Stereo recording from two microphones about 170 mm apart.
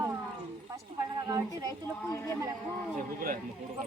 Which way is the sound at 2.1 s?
15° left (ahead or behind).